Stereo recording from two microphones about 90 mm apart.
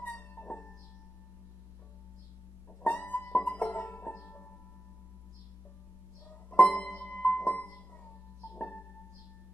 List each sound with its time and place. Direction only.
0.0 s music: 20° left (ahead or behind)
2.8 s music: 20° left (ahead or behind)
6.5 s music: 15° left (ahead or behind)